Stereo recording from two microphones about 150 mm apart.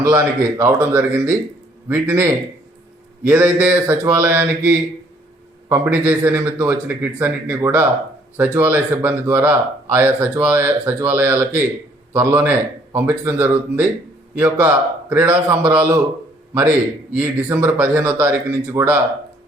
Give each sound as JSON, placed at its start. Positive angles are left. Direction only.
{"t": 0.0, "sound": "speech", "side_deg": -20}
{"t": 17.2, "sound": "speech", "side_deg": -15}